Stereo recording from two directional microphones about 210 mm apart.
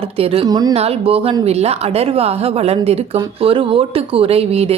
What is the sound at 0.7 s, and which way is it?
A woman's voice, 30° right (ahead or behind).